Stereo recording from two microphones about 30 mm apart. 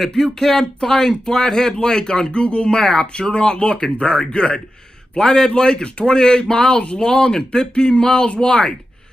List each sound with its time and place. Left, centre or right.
0.1 s speech: centre
2.3 s speech: left
2.7 s speech: left